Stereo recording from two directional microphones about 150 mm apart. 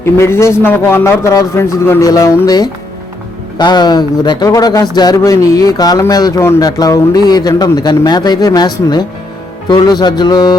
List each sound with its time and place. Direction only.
0.0 s a man's voice: 15° left (ahead or behind)